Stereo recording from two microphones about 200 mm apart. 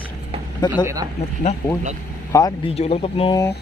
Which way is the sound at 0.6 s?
20° left (ahead or behind).